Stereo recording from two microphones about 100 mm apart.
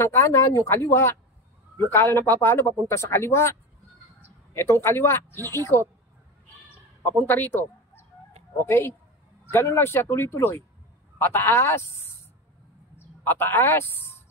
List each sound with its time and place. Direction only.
0.0 s speech: 25° left (ahead or behind)
4.6 s speech: 25° left (ahead or behind)
7.0 s speech: 20° left (ahead or behind)
13.2 s speech: 20° left (ahead or behind)